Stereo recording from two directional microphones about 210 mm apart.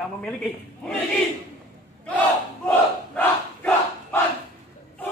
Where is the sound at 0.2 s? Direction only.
Centre (ahead or behind).